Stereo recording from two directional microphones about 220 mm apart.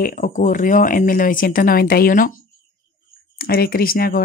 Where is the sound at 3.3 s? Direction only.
45° left (ahead or behind).